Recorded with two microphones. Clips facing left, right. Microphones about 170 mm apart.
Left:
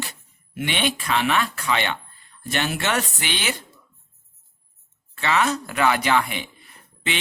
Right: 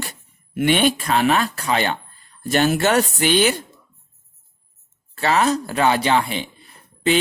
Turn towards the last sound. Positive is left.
turn(degrees=-35)  # may be behind; listen again after turning